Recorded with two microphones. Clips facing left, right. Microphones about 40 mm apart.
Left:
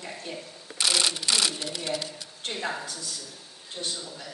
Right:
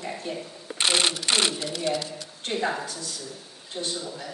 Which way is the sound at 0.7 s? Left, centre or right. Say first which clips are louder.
Right 3 dB; right.